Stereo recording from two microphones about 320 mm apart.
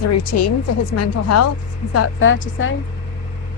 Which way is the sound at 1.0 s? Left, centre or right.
Left.